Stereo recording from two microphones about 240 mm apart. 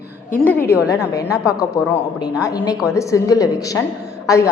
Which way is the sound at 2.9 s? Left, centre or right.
Centre.